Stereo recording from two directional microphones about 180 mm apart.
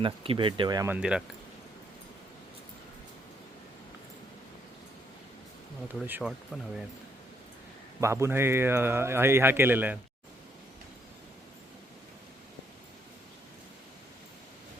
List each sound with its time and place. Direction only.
0.0 s speech: 30° right (ahead or behind)
0.9 s speech: 5° right (ahead or behind)
6.1 s speech: 10° right (ahead or behind)
8.0 s speech: 15° right (ahead or behind)